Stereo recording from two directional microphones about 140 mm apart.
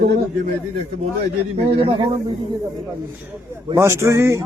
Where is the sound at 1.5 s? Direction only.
40° right (ahead or behind).